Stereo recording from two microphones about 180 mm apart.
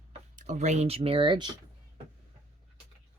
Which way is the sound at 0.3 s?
40° right (ahead or behind).